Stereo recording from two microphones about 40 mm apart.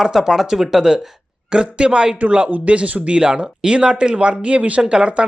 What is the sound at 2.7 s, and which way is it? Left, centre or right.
Speech, right.